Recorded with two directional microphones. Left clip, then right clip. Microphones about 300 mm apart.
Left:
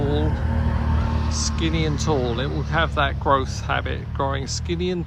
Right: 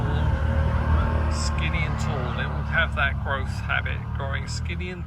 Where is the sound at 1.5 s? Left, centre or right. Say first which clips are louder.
Left 5 dB; centre.